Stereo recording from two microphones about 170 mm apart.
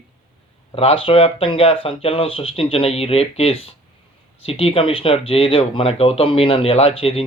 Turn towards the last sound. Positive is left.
turn(degrees=35)  # may be behind; listen again after turning